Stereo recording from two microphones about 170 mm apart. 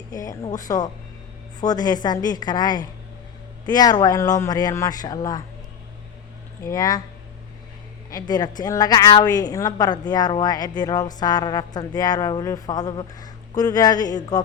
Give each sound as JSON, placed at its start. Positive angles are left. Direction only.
{"t": 0.1, "sound": "a woman's voice", "side_deg": 20}
{"t": 6.7, "sound": "a woman's voice", "side_deg": 20}
{"t": 8.1, "sound": "a woman's voice", "side_deg": 25}